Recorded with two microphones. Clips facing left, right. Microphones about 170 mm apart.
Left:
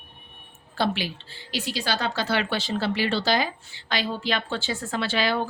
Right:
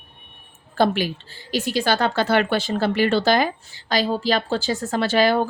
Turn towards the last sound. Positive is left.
turn(degrees=-45)  # may be behind; listen again after turning